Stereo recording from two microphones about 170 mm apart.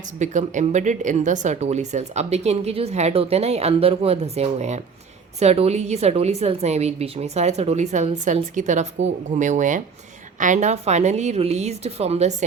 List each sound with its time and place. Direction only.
0.2 s speech: 45° right (ahead or behind)